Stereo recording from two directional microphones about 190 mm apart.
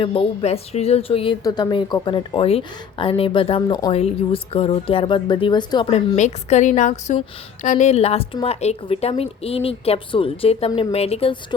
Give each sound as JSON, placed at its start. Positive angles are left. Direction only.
{"t": 0.0, "sound": "a woman's voice", "side_deg": 30}
{"t": 6.1, "sound": "speech", "side_deg": 40}